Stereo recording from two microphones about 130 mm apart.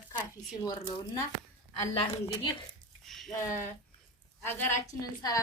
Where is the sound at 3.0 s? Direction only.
Centre (ahead or behind).